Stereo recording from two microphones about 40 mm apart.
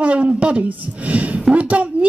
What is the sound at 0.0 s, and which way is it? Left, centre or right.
A woman's voice, right.